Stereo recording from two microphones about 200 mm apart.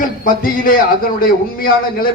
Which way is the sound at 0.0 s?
45° left (ahead or behind).